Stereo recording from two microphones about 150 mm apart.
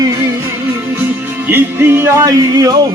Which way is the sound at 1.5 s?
15° right (ahead or behind).